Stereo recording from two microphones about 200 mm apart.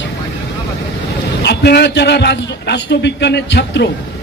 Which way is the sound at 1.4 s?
55° left (ahead or behind).